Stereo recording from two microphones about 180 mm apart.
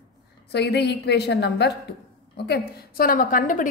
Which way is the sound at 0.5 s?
65° left (ahead or behind).